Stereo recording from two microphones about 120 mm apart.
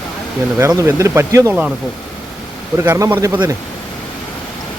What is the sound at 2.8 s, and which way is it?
Speech, 20° right (ahead or behind).